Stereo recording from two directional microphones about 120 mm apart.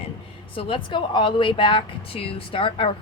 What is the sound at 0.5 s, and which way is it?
Speech, 45° left (ahead or behind).